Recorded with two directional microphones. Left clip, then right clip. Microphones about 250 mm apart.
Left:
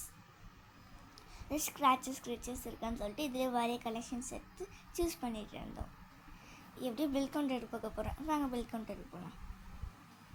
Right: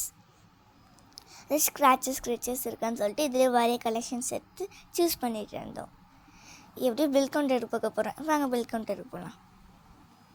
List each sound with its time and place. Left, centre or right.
1.3 s a woman's voice: right